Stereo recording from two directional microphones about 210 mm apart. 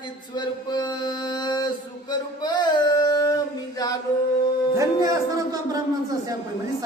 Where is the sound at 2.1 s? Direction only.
20° left (ahead or behind).